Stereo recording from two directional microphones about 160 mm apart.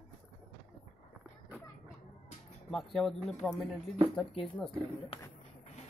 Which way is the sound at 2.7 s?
Centre (ahead or behind).